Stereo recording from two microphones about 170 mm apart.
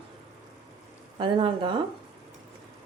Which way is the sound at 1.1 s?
30° right (ahead or behind).